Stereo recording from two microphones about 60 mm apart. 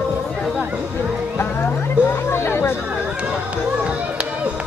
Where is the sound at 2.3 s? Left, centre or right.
Left.